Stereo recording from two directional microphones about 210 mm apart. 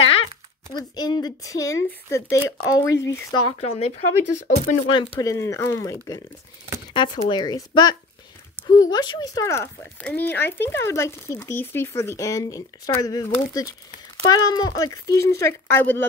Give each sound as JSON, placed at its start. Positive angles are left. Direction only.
{"t": 0.9, "sound": "speech", "side_deg": 20}
{"t": 3.4, "sound": "speech", "side_deg": 30}